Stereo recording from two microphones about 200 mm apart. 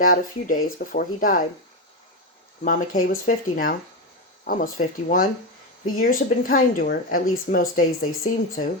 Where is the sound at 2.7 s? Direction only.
45° left (ahead or behind).